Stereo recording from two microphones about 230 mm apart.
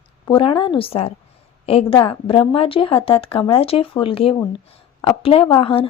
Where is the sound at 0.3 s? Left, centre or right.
Left.